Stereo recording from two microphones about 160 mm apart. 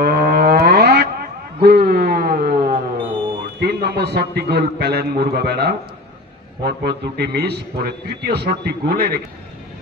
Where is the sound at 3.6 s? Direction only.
85° right.